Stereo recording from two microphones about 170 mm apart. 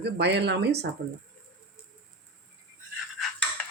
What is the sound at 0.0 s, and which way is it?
Speech, 80° right.